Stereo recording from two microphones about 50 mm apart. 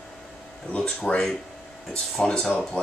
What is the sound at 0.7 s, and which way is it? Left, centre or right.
Speech, left.